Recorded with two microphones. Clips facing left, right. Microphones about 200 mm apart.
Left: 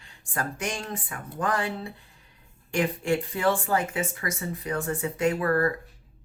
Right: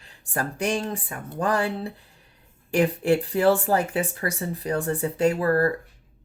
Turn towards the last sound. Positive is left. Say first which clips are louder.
# right 3 dB
turn(degrees=-30)  # may be behind; listen again after turning